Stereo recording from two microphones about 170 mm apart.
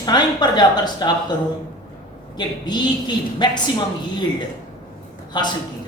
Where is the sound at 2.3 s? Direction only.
25° left (ahead or behind).